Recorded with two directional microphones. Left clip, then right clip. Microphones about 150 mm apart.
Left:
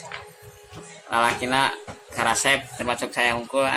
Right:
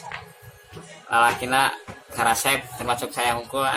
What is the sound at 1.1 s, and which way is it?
A man's voice, 10° left (ahead or behind).